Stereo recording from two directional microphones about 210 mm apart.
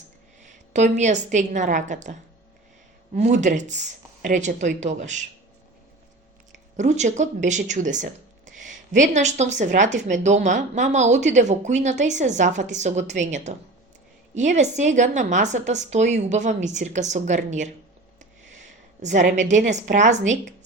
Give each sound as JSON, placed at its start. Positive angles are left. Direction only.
{"t": 0.4, "sound": "a woman's voice", "side_deg": -35}
{"t": 3.2, "sound": "speech", "side_deg": -35}
{"t": 6.7, "sound": "speech", "side_deg": -35}
{"t": 19.0, "sound": "speech", "side_deg": -35}